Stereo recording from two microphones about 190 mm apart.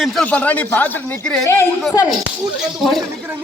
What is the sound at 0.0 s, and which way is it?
A man's voice, centre (ahead or behind).